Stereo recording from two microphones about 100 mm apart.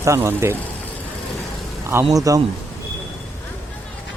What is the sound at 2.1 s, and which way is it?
Speech, 35° right (ahead or behind).